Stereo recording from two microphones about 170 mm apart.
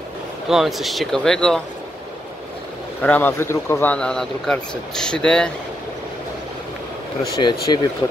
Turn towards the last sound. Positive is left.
turn(degrees=25)  # may be behind; listen again after turning